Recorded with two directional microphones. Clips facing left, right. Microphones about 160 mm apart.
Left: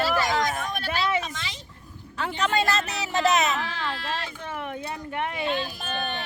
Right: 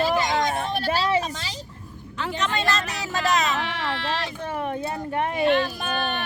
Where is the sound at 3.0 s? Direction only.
25° left (ahead or behind).